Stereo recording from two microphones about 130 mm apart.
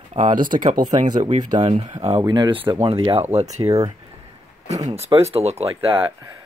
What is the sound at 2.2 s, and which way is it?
Speech, 35° right (ahead or behind).